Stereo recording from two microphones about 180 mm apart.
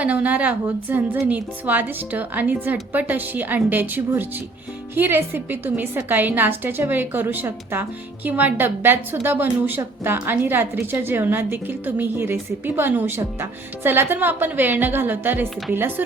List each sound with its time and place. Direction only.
0.0 s a woman's voice: 5° right (ahead or behind)